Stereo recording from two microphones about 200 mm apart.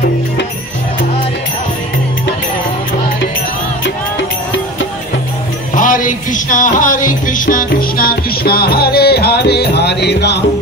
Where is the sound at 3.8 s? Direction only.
65° left (ahead or behind).